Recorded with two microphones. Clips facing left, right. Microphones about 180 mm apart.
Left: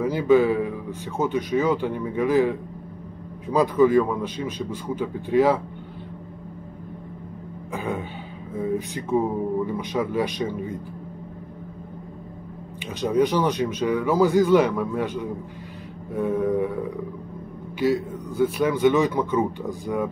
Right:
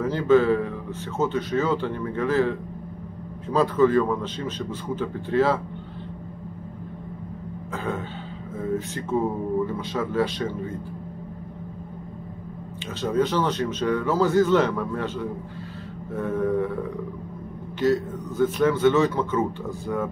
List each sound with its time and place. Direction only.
0.0 s speech: 10° left (ahead or behind)
7.7 s speech: 10° left (ahead or behind)
13.0 s speech: 15° left (ahead or behind)
17.7 s speech: 10° left (ahead or behind)